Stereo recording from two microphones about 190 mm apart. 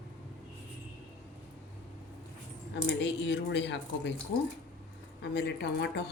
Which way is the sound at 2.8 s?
65° left (ahead or behind).